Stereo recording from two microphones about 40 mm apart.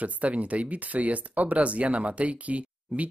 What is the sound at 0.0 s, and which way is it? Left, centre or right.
Speech, right.